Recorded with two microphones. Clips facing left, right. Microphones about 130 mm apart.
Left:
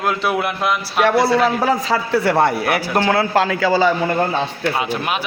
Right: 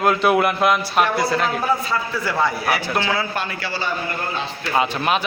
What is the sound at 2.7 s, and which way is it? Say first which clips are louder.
Speech: left 5 dB; 45° left (ahead or behind).